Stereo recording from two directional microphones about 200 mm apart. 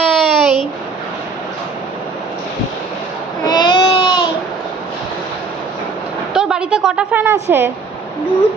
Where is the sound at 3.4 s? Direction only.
20° left (ahead or behind).